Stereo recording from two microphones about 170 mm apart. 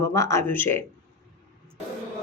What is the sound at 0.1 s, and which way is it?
Speech, 15° left (ahead or behind).